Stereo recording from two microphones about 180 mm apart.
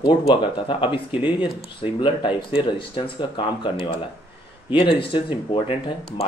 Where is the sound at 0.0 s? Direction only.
30° left (ahead or behind).